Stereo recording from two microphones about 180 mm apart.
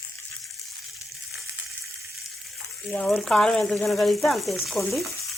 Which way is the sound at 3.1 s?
Centre (ahead or behind).